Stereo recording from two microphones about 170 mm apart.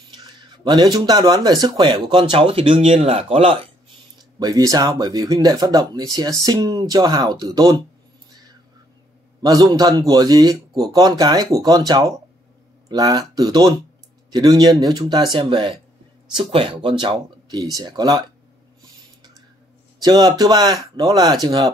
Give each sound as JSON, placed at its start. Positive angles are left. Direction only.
{"t": 0.1, "sound": "speech", "side_deg": -25}
{"t": 4.4, "sound": "speech", "side_deg": -20}
{"t": 9.4, "sound": "speech", "side_deg": -20}
{"t": 20.0, "sound": "speech", "side_deg": -25}